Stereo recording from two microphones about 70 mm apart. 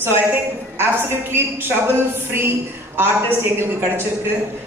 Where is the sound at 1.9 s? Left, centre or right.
Right.